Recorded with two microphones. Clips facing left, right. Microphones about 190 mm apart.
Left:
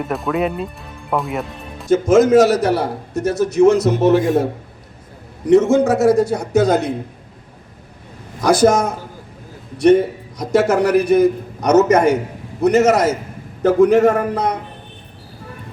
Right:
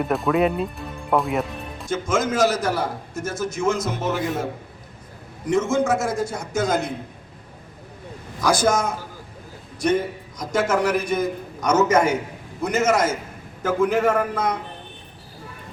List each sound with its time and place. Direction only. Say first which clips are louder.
0.0 s speech: even; centre (ahead or behind)
1.9 s a man's voice: left 11 dB; 40° left (ahead or behind)
2.3 s a man's voice: left 8 dB; 70° left (ahead or behind)
3.8 s a man's voice: left 11 dB; 35° left (ahead or behind)
5.5 s a man's voice: left 7 dB; 35° left (ahead or behind)
6.0 s a man's voice: left 11 dB; 65° left (ahead or behind)
6.3 s a man's voice: left 8 dB; 35° left (ahead or behind)
8.6 s a man's voice: left 7 dB; 35° left (ahead or behind)